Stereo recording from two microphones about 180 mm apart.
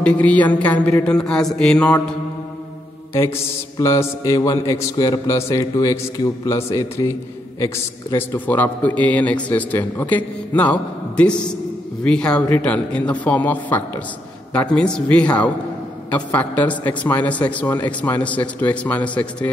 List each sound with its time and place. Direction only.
0.0 s a man's voice: 10° left (ahead or behind)
3.7 s a man's voice: 15° left (ahead or behind)